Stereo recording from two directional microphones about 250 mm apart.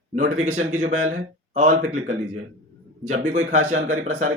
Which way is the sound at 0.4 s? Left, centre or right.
Right.